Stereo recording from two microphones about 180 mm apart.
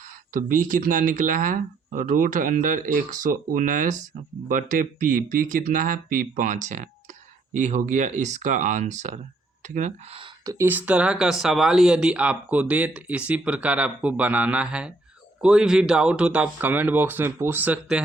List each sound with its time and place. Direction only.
0.3 s speech: 50° right (ahead or behind)
10.4 s speech: 15° right (ahead or behind)